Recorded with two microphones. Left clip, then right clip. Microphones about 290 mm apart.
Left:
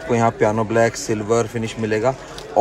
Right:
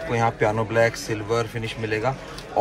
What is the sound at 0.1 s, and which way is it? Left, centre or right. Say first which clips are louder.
A man's voice: left 5 dB; centre.